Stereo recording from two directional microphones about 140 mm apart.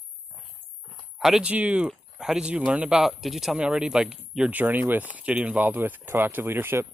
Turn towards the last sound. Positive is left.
turn(degrees=-15)  # may be behind; listen again after turning